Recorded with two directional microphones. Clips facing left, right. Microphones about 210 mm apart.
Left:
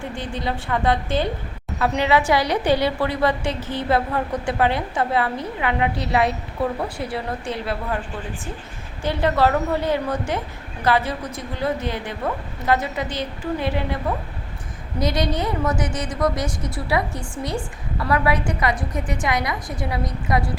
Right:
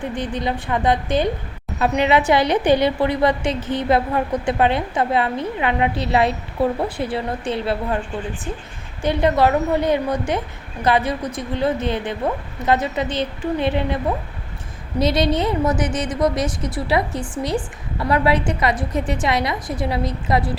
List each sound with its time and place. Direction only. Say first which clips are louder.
0.0 s a woman's voice: right 4 dB; 20° right (ahead or behind)
9.0 s a woman's voice: right 3 dB; 20° right (ahead or behind)